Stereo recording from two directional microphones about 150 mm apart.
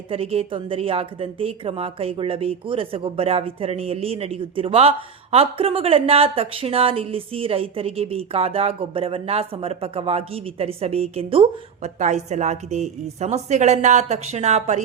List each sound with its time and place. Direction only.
0.1 s speech: 40° right (ahead or behind)
11.9 s a woman's voice: 50° right (ahead or behind)